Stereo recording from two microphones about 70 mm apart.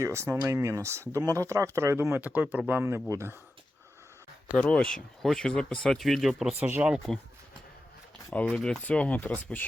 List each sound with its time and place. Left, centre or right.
0.0 s speech: right
2.2 s speech: right
4.5 s speech: centre
6.6 s speech: right
7.1 s speech: centre
8.3 s speech: centre